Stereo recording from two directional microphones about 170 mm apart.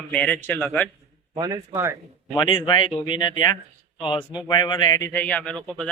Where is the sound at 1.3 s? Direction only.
25° right (ahead or behind).